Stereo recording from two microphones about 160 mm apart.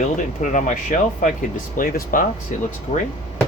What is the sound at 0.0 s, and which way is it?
Speech, 50° left (ahead or behind).